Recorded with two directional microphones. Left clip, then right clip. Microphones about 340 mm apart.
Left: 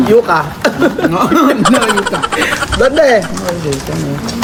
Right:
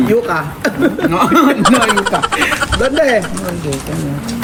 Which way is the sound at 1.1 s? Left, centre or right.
Centre.